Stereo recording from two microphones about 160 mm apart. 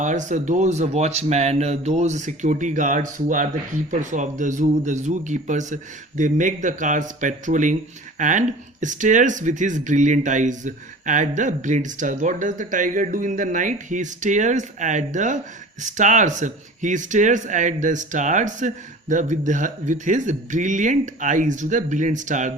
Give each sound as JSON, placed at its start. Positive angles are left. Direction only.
{"t": 0.0, "sound": "speech", "side_deg": -50}